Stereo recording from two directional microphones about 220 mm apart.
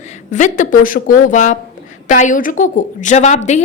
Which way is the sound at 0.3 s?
35° left (ahead or behind).